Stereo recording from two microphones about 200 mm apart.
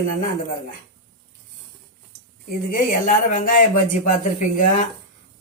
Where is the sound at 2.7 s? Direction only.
45° left (ahead or behind).